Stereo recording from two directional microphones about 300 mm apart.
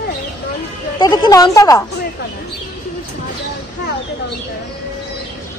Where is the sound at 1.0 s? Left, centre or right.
Centre.